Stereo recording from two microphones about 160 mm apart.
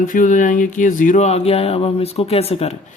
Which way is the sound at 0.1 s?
55° left (ahead or behind).